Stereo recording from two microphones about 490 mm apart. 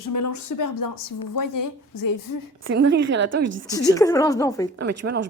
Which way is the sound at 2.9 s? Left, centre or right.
Right.